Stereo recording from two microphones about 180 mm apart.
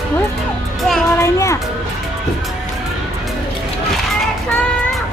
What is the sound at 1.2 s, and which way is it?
Speech, 15° left (ahead or behind).